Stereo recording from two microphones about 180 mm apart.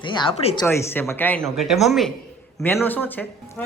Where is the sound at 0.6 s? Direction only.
10° left (ahead or behind).